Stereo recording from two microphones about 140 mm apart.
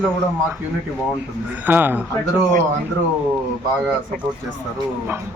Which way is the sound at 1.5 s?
15° right (ahead or behind).